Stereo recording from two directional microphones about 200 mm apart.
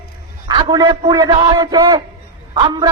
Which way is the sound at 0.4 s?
20° right (ahead or behind).